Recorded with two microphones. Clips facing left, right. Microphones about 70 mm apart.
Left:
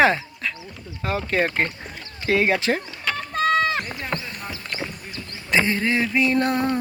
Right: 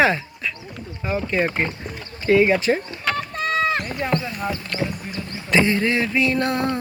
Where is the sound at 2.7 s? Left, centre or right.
Centre.